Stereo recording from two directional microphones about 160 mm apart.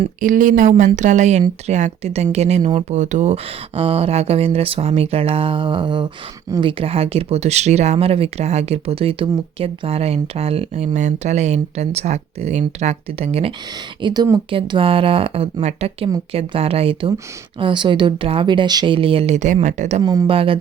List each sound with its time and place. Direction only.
0.2 s speech: 55° right (ahead or behind); by 13.5 s 40° right (ahead or behind)
14.0 s speech: 25° right (ahead or behind); by 20.0 s 50° right (ahead or behind)
20.0 s speech: 25° right (ahead or behind)